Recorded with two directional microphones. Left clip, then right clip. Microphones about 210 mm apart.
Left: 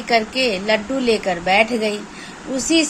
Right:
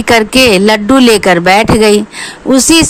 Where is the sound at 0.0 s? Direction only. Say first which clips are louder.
Right 11 dB; 55° right (ahead or behind).